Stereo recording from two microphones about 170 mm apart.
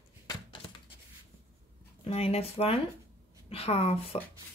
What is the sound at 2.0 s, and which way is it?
Speech, 35° left (ahead or behind).